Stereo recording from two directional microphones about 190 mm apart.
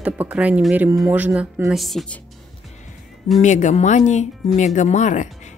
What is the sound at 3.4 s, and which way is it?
Speech, 40° left (ahead or behind).